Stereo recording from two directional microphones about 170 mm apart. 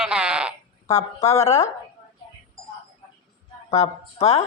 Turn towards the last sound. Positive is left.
turn(degrees=40)  # may be behind; listen again after turning